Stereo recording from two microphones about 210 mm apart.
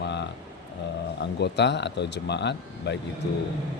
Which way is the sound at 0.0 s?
55° left (ahead or behind).